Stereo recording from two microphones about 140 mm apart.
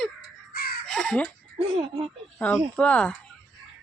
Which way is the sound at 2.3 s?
10° left (ahead or behind).